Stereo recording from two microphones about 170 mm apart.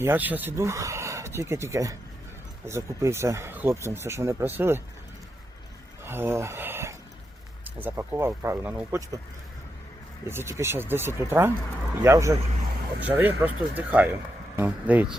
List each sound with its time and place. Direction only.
0.0 s speech: 10° right (ahead or behind)
6.1 s a sound: 15° right (ahead or behind)
7.6 s speech: 10° right (ahead or behind)
10.2 s speech: 15° right (ahead or behind)